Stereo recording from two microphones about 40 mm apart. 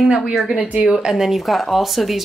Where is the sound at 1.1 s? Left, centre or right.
Centre.